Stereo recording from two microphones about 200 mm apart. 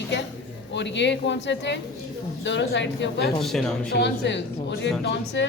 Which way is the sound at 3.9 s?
60° left (ahead or behind).